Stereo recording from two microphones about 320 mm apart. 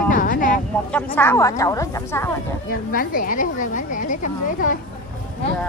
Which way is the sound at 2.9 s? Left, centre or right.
Left.